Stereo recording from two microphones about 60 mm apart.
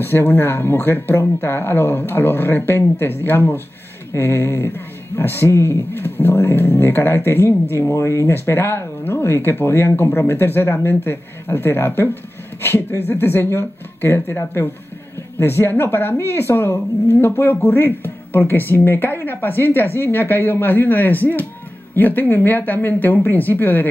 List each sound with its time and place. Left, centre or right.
0.0 s speech: left
8.3 s speech: left
13.2 s speech: left